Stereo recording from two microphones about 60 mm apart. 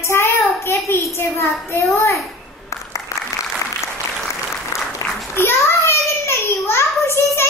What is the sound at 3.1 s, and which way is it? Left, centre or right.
Applause, left.